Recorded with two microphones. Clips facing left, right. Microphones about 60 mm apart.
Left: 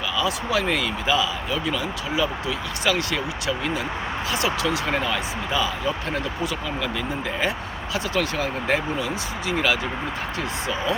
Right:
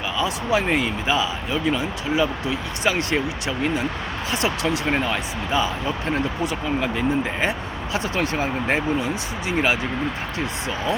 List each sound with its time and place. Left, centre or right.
0.2 s speech: right
7.9 s speech: right